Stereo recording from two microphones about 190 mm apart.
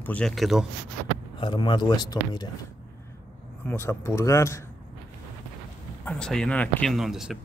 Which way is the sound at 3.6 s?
10° left (ahead or behind).